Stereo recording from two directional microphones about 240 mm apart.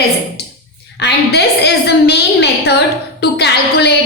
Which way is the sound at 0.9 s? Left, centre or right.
Left.